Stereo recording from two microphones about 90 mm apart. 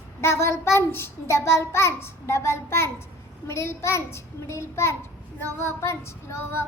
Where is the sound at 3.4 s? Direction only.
30° left (ahead or behind).